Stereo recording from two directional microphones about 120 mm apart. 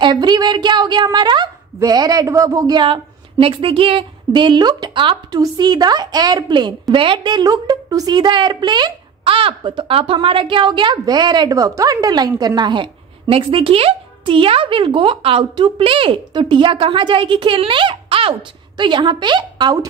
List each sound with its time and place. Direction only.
0.0 s a woman's voice: 35° right (ahead or behind)